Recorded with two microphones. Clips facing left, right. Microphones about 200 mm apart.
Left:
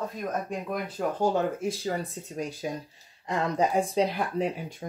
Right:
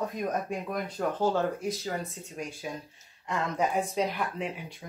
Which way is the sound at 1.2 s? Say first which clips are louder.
Left 2 dB; 15° left (ahead or behind).